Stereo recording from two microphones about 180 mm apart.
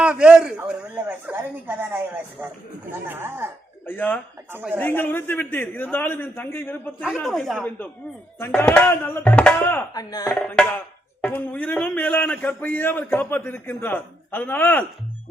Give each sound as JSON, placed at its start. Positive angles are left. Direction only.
{"t": 0.0, "sound": "a sound", "side_deg": -5}
{"t": 1.0, "sound": "speech", "side_deg": -10}
{"t": 3.8, "sound": "a man's voice", "side_deg": 10}
{"t": 4.5, "sound": "speech", "side_deg": -10}
{"t": 4.8, "sound": "a man's voice", "side_deg": 10}
{"t": 7.0, "sound": "a man's voice", "side_deg": 0}
{"t": 9.9, "sound": "speech", "side_deg": 20}
{"t": 10.6, "sound": "a man's voice", "side_deg": 5}